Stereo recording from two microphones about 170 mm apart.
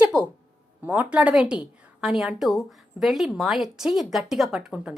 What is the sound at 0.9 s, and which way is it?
A woman's voice, 10° right (ahead or behind).